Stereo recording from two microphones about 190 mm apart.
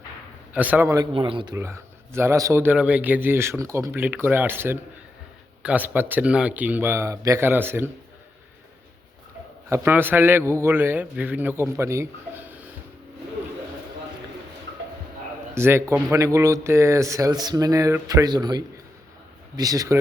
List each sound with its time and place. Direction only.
0.5 s a man's voice: 10° right (ahead or behind)
1.1 s speech: 25° right (ahead or behind)
1.5 s a man's voice: 15° right (ahead or behind)
9.6 s a man's voice: 15° right (ahead or behind)
15.5 s a man's voice: 15° right (ahead or behind)